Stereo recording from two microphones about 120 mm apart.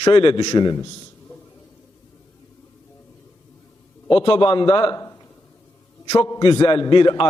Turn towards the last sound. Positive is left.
turn(degrees=40)  # may be behind; listen again after turning